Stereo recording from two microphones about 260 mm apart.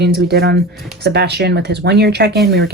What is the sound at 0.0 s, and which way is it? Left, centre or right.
Speech, right.